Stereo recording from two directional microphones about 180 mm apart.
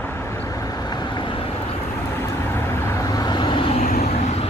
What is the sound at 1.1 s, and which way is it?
Vehicle, 25° left (ahead or behind).